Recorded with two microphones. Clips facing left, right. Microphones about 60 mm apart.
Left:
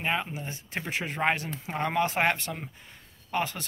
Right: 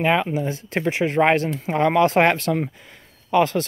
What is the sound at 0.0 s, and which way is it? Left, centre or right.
Speech, right.